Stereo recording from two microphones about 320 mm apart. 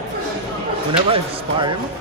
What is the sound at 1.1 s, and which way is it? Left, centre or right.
Speech, centre.